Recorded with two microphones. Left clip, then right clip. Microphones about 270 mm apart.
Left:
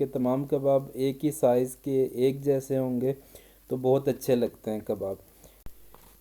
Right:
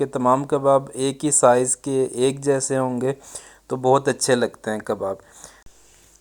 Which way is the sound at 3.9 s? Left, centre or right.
Centre.